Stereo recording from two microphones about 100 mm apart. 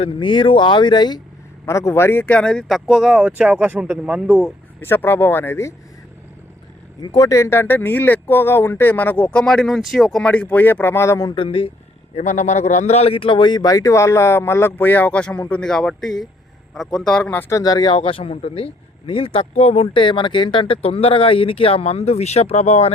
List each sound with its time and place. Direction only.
0.0 s speech: 55° left (ahead or behind)
1.6 s speech: 30° left (ahead or behind); by 4.4 s 15° right (ahead or behind)
4.8 s speech: 25° left (ahead or behind)
7.0 s speech: 40° left (ahead or behind)
11.3 s speech: 60° left (ahead or behind)
12.9 s a man's voice: 85° left; by 17.3 s 5° left (ahead or behind)
17.5 s speech: 40° left (ahead or behind)
17.9 s speech: 65° left (ahead or behind); by 20.0 s 90° left
20.0 s speech: 55° left (ahead or behind); by 22.9 s 90° left